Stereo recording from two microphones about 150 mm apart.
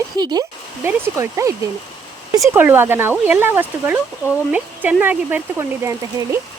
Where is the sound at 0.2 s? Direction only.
30° right (ahead or behind).